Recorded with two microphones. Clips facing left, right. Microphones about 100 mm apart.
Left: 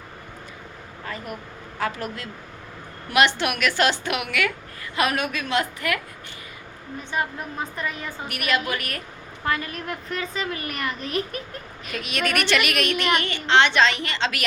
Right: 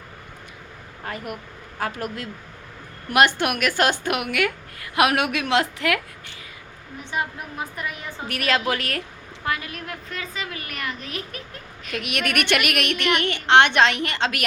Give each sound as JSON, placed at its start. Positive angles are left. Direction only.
{"t": 1.8, "sound": "a woman's voice", "side_deg": -45}
{"t": 4.9, "sound": "a woman's voice", "side_deg": -80}
{"t": 7.1, "sound": "a woman's voice", "side_deg": -15}
{"t": 8.4, "sound": "a woman's voice", "side_deg": -90}
{"t": 9.5, "sound": "a woman's voice", "side_deg": -5}
{"t": 11.9, "sound": "a woman's voice", "side_deg": -60}